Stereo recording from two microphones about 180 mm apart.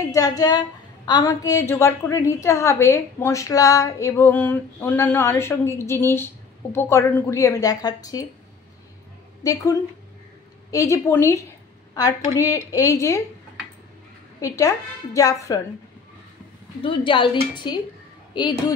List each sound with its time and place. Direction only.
0.1 s a woman's voice: 20° left (ahead or behind)
9.4 s a woman's voice: 20° left (ahead or behind)
14.4 s a woman's voice: 20° left (ahead or behind)
16.8 s a woman's voice: 30° left (ahead or behind)